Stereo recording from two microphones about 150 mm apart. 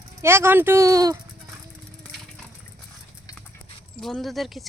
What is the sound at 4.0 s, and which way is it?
Speech, centre (ahead or behind).